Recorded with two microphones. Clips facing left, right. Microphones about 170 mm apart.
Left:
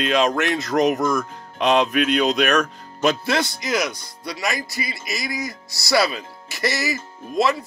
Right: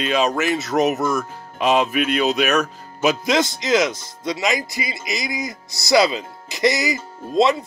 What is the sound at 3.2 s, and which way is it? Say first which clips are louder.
Speech: right 3 dB; 20° right (ahead or behind).